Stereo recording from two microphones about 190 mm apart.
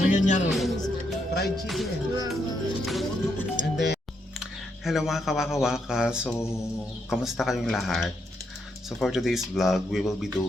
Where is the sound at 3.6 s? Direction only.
60° left (ahead or behind).